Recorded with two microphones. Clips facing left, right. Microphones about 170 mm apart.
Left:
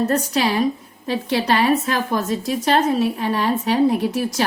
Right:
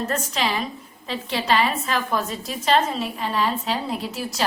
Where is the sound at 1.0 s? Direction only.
55° left (ahead or behind).